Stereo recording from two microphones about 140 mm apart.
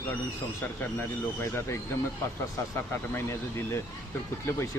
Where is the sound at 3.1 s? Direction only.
15° left (ahead or behind).